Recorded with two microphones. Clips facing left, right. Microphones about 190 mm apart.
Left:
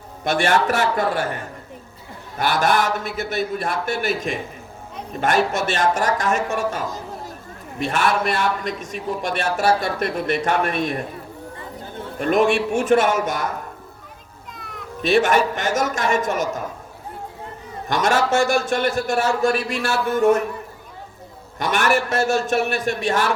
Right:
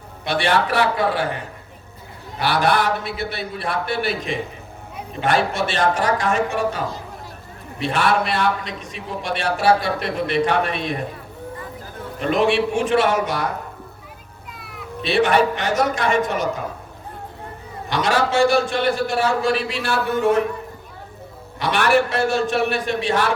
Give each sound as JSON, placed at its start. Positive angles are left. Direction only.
{"t": 0.3, "sound": "a man's voice", "side_deg": 45}
{"t": 12.2, "sound": "a man's voice", "side_deg": 50}
{"t": 14.5, "sound": "children playing", "side_deg": -5}
{"t": 15.0, "sound": "a man's voice", "side_deg": 45}
{"t": 17.8, "sound": "a man's voice", "side_deg": 45}
{"t": 21.6, "sound": "a man's voice", "side_deg": 45}